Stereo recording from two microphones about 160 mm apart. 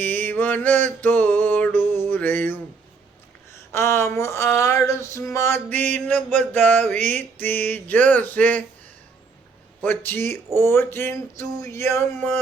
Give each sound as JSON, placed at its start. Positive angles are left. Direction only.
{"t": 0.0, "sound": "mantra", "side_deg": 10}
{"t": 3.7, "sound": "speech", "side_deg": 15}
{"t": 9.8, "sound": "speech", "side_deg": 10}